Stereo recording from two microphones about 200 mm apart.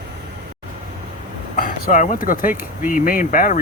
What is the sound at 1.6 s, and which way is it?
Speech, 40° left (ahead or behind).